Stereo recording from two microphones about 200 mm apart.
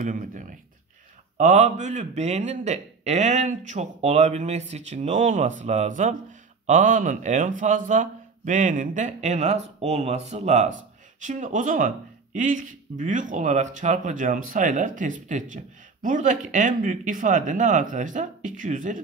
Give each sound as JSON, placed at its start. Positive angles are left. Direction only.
{"t": 0.0, "sound": "speech", "side_deg": -40}